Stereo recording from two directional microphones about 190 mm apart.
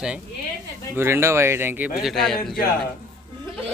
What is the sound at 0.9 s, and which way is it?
Speech, 15° right (ahead or behind).